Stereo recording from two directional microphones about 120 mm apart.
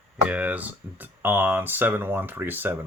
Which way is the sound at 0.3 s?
10° right (ahead or behind).